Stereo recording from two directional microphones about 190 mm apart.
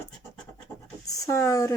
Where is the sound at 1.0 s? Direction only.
15° left (ahead or behind).